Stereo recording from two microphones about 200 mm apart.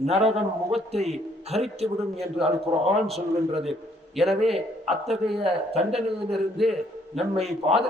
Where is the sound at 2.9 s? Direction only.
Centre (ahead or behind).